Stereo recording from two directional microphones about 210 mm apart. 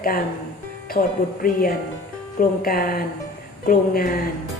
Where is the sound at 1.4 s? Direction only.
40° left (ahead or behind).